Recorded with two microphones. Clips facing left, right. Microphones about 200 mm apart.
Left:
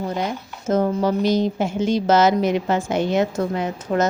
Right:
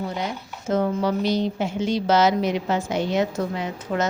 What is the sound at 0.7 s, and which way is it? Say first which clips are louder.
A woman's voice: left 3 dB; 45° left (ahead or behind).